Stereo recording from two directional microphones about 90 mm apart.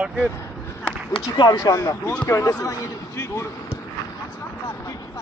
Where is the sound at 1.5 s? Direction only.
40° left (ahead or behind).